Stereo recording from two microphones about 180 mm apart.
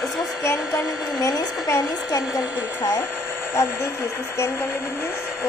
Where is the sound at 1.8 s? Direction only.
Centre (ahead or behind).